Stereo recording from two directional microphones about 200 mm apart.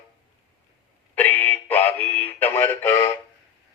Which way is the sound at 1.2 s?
10° left (ahead or behind).